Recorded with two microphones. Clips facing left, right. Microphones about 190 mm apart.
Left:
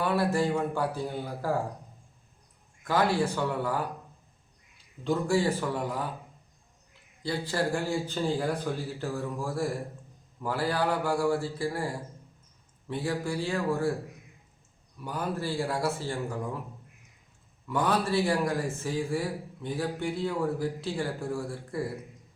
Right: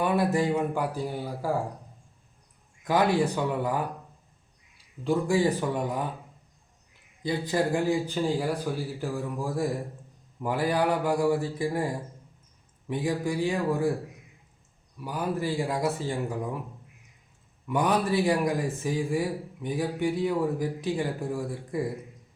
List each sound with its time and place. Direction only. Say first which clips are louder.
0.0 s a man's voice: right 2 dB; 15° right (ahead or behind)
2.8 s a man's voice: right 2 dB; 20° right (ahead or behind)
5.0 s a man's voice: right 2 dB; 15° right (ahead or behind)
7.2 s a man's voice: right 3 dB; 20° right (ahead or behind)
15.0 s a man's voice: right 3 dB; 10° right (ahead or behind)
17.7 s a man's voice: right 2 dB; 15° right (ahead or behind)